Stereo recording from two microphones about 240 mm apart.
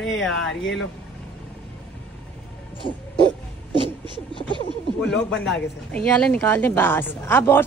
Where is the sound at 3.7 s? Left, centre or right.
Centre.